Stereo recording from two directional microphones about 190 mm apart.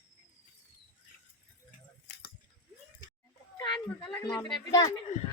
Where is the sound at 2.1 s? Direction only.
60° left (ahead or behind).